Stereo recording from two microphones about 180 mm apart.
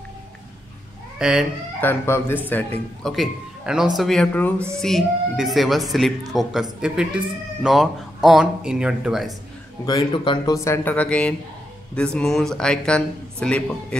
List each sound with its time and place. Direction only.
1.1 s chicken: 5° right (ahead or behind)
1.8 s speech: 10° left (ahead or behind); by 9.3 s 5° right (ahead or behind)
9.8 s speech: 25° left (ahead or behind); by 13.9 s 5° left (ahead or behind)